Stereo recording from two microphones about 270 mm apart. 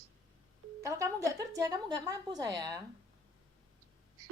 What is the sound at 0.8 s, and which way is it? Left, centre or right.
A woman's voice, centre.